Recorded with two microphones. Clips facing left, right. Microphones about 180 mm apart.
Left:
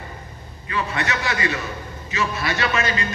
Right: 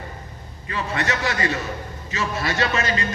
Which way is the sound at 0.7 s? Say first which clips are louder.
Even; 40° right (ahead or behind).